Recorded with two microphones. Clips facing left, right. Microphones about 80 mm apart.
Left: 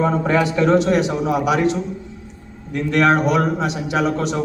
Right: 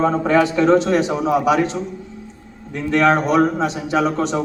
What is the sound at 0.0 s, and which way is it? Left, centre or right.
A man's voice, right.